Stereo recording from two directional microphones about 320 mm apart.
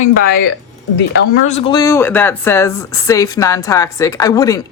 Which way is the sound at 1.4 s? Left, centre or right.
Centre.